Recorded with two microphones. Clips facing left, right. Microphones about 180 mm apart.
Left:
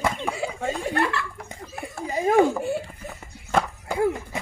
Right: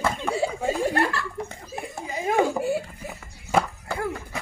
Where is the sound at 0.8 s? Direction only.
40° right (ahead or behind).